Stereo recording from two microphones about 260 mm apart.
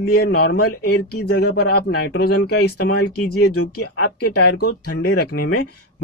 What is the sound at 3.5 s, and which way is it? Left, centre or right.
Speech, left.